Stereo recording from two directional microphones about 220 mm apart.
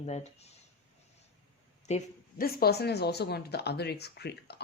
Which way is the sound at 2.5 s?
45° left (ahead or behind).